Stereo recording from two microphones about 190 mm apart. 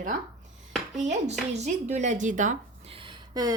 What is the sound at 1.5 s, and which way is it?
A woman's voice, 35° right (ahead or behind).